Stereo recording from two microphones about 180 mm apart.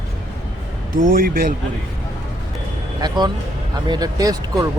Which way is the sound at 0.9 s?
50° right (ahead or behind).